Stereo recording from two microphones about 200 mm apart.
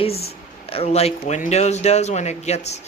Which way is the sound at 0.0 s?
30° left (ahead or behind).